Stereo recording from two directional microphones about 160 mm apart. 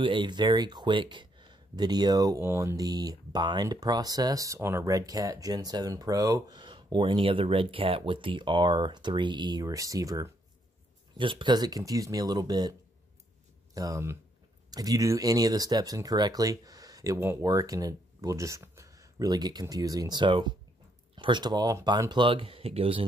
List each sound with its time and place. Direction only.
0.0 s speech: 30° right (ahead or behind)
13.7 s speech: 20° right (ahead or behind); by 23.0 s 35° right (ahead or behind)